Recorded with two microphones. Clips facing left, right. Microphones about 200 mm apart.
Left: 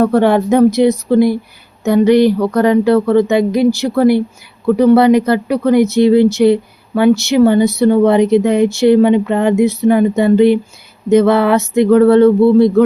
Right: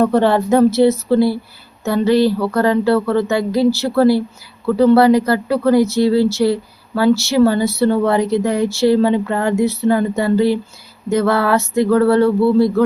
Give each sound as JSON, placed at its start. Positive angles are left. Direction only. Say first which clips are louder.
{"t": 0.0, "sound": "speech", "louder": "left 3 dB", "side_deg": 10}